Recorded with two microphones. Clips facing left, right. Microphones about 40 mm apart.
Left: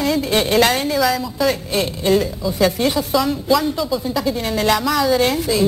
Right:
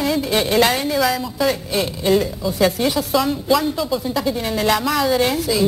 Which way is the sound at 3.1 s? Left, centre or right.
Centre.